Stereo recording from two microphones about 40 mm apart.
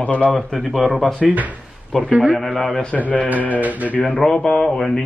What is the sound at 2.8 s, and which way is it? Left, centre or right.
Mantra, left.